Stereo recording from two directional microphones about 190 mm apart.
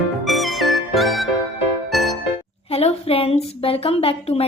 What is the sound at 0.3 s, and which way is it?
Music, centre (ahead or behind).